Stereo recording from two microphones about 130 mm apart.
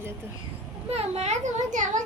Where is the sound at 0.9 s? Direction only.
55° right (ahead or behind); by 2.0 s 70° right (ahead or behind).